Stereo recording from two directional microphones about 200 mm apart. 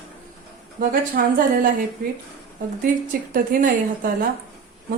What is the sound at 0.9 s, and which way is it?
Speech, 45° right (ahead or behind).